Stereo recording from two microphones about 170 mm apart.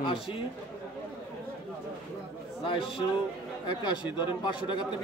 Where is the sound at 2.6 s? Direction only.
30° left (ahead or behind).